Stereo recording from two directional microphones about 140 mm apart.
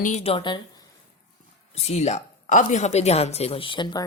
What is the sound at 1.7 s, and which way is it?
A woman's voice, 50° left (ahead or behind).